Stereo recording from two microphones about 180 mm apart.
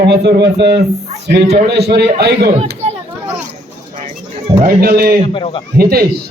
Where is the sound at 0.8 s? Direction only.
35° right (ahead or behind).